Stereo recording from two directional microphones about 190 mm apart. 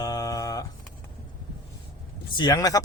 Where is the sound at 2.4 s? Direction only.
15° left (ahead or behind).